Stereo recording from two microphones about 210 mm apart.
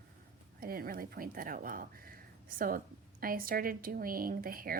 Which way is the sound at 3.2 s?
45° right (ahead or behind).